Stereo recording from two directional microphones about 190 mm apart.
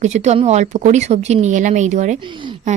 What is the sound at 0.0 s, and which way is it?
A woman's voice, 35° right (ahead or behind).